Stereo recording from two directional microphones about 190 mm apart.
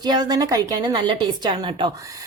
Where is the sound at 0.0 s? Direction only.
20° right (ahead or behind).